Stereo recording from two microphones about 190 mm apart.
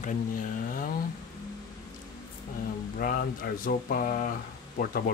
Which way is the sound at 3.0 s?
50° left (ahead or behind).